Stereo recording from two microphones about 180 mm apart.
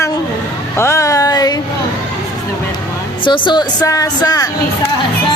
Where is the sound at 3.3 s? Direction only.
25° left (ahead or behind).